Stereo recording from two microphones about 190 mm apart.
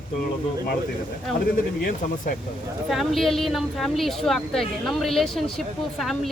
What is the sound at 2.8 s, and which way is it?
A woman's voice, centre (ahead or behind).